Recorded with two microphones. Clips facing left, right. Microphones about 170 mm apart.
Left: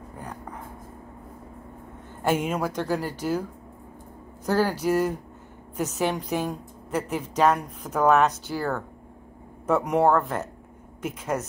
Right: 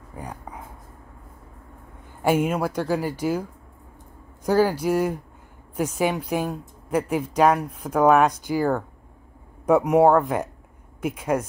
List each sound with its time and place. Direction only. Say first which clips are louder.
0.2 s speech: right 2 dB; 10° right (ahead or behind)
2.2 s a woman's voice: right 3 dB; 10° right (ahead or behind)
4.5 s a woman's voice: right 3 dB; 10° right (ahead or behind)